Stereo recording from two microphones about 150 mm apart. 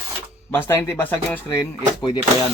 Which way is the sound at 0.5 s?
15° left (ahead or behind).